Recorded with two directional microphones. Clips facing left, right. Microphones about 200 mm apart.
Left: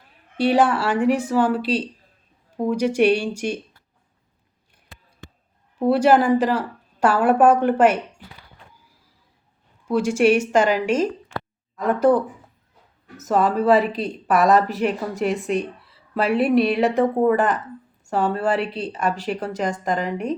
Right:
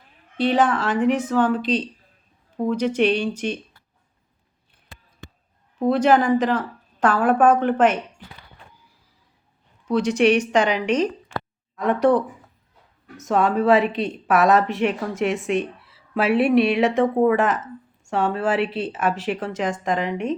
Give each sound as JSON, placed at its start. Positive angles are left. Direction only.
{"t": 0.3, "sound": "a woman's voice", "side_deg": 10}
{"t": 5.8, "sound": "a woman's voice", "side_deg": 10}
{"t": 9.8, "sound": "a woman's voice", "side_deg": 10}